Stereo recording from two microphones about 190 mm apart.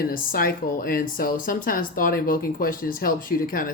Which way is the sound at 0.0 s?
50° left (ahead or behind).